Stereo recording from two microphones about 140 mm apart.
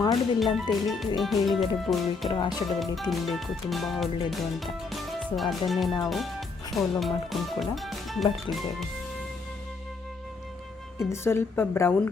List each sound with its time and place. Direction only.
0.3 s speech: centre (ahead or behind)
11.1 s a woman's voice: 15° left (ahead or behind)